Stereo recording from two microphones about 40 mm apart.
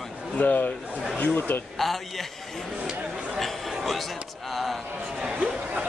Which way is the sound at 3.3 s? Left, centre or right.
Centre.